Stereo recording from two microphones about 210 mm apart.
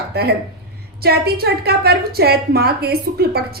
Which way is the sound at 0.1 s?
50° right (ahead or behind).